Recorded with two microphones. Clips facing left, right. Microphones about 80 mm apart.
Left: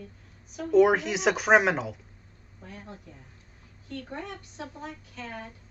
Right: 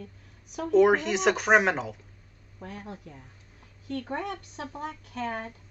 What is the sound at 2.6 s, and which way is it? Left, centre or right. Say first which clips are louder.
Speech: right 4 dB; right.